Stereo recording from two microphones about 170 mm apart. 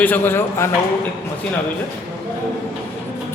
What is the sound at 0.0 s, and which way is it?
Speech, 10° left (ahead or behind).